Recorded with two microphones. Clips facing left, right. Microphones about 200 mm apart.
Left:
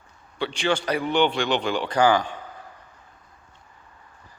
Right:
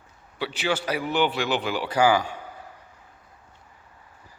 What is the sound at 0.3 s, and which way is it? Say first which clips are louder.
A man's voice: left 2 dB; 5° right (ahead or behind).